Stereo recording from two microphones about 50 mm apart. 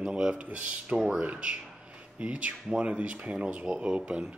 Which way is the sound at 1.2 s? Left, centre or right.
Right.